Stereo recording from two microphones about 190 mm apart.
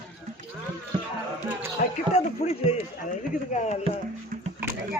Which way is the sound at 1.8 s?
45° left (ahead or behind).